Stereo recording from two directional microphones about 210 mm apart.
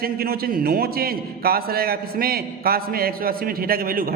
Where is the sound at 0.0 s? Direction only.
45° right (ahead or behind).